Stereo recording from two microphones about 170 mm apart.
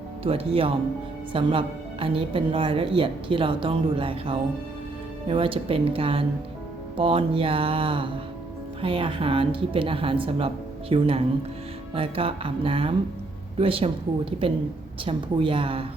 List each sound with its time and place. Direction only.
0.3 s a woman's voice: 35° right (ahead or behind)